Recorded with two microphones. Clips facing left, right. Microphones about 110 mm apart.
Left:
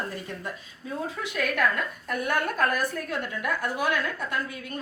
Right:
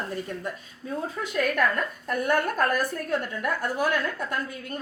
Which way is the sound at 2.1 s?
45° right (ahead or behind).